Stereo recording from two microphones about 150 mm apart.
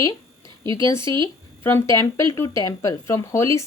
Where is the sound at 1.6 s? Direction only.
15° left (ahead or behind).